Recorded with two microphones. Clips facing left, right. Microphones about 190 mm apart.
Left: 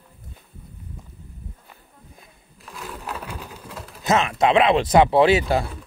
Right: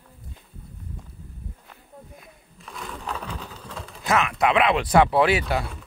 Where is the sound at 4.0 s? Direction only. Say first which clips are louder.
Left 3 dB; 25° left (ahead or behind).